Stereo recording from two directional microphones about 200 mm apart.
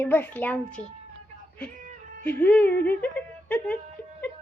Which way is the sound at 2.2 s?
5° left (ahead or behind).